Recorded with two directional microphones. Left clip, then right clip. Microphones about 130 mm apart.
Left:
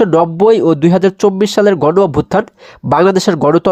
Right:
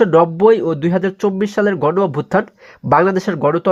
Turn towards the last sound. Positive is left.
turn(degrees=55)  # may be behind; listen again after turning